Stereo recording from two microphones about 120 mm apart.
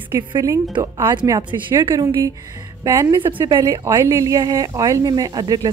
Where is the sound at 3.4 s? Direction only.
30° right (ahead or behind).